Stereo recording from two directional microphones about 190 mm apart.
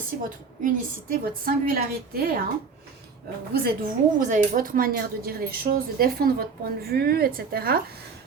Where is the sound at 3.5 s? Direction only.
45° right (ahead or behind).